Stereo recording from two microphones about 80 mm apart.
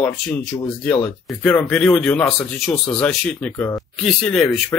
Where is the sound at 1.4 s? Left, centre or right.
Centre.